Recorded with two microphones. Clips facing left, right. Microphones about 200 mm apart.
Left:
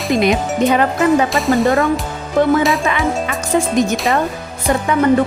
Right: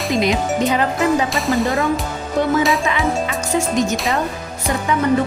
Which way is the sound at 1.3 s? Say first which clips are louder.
Left 4 dB; centre (ahead or behind).